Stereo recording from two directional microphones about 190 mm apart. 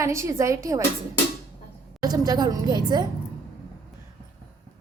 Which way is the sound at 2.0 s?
20° right (ahead or behind).